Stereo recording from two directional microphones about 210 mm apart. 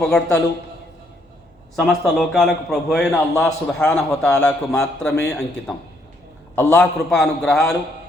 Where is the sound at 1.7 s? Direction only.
Centre (ahead or behind).